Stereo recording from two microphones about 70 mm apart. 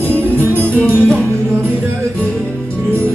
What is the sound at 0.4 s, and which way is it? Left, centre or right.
Music, right.